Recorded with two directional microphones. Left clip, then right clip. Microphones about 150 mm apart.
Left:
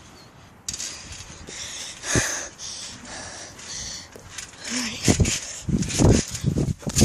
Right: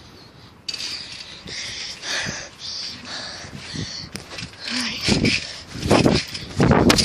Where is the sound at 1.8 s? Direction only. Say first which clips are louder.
Left 2 dB; 50° left (ahead or behind).